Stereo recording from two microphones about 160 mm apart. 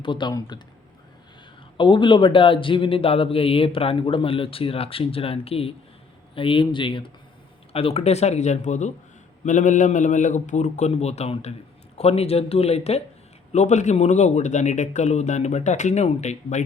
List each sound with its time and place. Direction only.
0.0 s speech: 30° left (ahead or behind)
1.8 s speech: 30° left (ahead or behind); by 16.6 s 45° left (ahead or behind)